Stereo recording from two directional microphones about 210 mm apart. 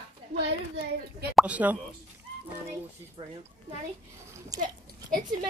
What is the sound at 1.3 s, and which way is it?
Speech, 5° right (ahead or behind).